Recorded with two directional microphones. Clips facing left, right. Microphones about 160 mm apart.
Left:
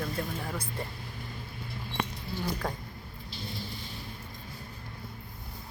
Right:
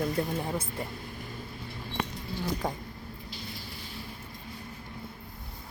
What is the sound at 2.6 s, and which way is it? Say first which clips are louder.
Speech: right 2 dB; 15° right (ahead or behind).